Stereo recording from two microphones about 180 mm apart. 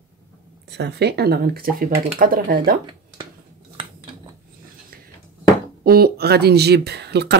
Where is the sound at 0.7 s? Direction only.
70° right (ahead or behind).